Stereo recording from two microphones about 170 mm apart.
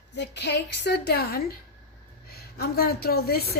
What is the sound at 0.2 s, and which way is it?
A woman's voice, 90° left.